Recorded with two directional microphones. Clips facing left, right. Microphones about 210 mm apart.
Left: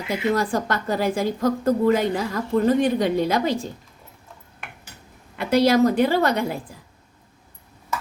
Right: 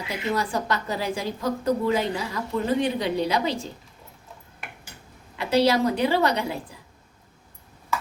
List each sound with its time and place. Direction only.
0.3 s a woman's voice: 50° left (ahead or behind)
5.4 s a woman's voice: 50° left (ahead or behind)